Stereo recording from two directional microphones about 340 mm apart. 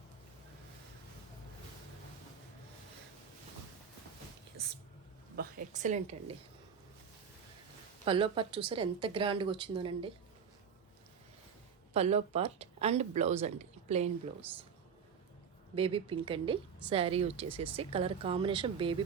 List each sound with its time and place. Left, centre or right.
5.4 s a woman's voice: right
8.0 s speech: centre
11.9 s speech: centre
15.7 s speech: centre